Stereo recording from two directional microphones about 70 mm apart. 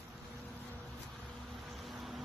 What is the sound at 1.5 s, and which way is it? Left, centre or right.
Vehicle, centre.